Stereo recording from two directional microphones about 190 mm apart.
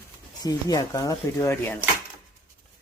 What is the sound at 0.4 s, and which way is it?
Speech, 20° left (ahead or behind).